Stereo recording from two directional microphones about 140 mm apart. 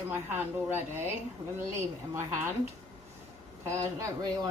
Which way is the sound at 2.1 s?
20° right (ahead or behind).